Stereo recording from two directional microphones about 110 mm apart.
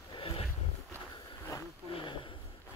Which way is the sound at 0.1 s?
55° left (ahead or behind).